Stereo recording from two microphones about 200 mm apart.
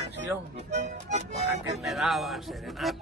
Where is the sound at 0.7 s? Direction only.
35° right (ahead or behind).